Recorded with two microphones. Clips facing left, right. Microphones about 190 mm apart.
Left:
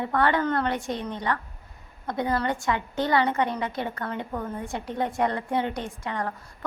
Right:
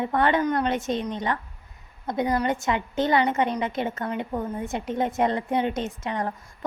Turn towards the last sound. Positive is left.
turn(degrees=-20)  # may be behind; listen again after turning